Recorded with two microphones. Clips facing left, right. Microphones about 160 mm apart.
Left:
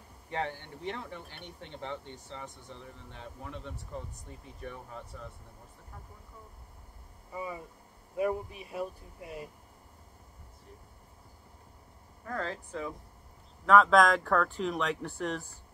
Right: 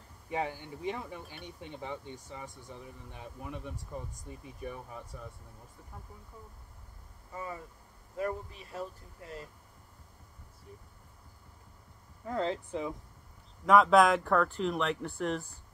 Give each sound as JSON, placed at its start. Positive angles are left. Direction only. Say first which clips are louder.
{"t": 0.3, "sound": "speech", "louder": "right 1 dB", "side_deg": -10}
{"t": 7.3, "sound": "speech", "louder": "left 2 dB", "side_deg": 15}
{"t": 12.3, "sound": "speech", "louder": "right 4 dB", "side_deg": -20}